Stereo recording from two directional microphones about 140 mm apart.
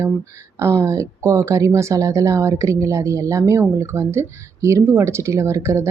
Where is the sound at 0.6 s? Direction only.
20° right (ahead or behind).